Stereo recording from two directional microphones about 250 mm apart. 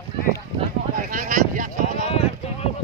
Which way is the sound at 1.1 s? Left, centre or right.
Right.